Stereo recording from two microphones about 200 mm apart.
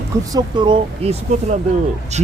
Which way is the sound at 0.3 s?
20° right (ahead or behind).